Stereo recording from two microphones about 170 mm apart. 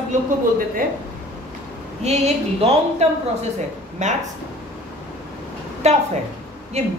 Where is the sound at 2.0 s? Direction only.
40° right (ahead or behind).